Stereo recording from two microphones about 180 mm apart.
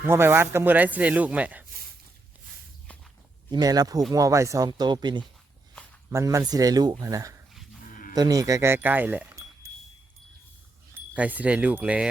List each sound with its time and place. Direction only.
0.0 s speech: 10° right (ahead or behind)
3.5 s speech: 20° right (ahead or behind)
7.5 s livestock: centre (ahead or behind)
8.1 s speech: 20° right (ahead or behind)
10.9 s speech: 10° right (ahead or behind)